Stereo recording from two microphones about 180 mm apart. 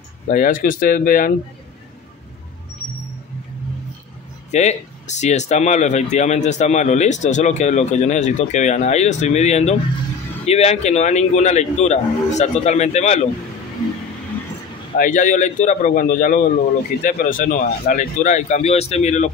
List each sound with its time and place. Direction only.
0.3 s speech: 50° left (ahead or behind)
4.5 s speech: 40° left (ahead or behind)
15.0 s speech: 45° left (ahead or behind)